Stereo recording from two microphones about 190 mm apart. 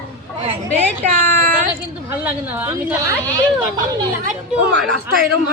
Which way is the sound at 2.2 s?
10° right (ahead or behind).